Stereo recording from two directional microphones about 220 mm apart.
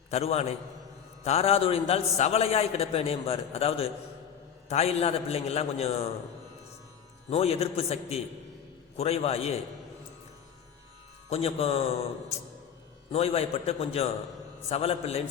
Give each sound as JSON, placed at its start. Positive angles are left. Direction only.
{"t": 0.1, "sound": "a man's voice", "side_deg": 30}
{"t": 7.3, "sound": "a man's voice", "side_deg": 25}
{"t": 11.3, "sound": "a man's voice", "side_deg": 25}
{"t": 13.1, "sound": "a man's voice", "side_deg": 25}